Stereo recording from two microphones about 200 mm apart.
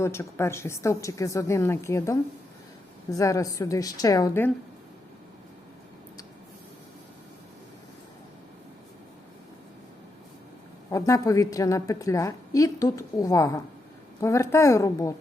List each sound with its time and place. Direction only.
0.0 s a woman's voice: 15° left (ahead or behind)
10.9 s a woman's voice: 15° left (ahead or behind)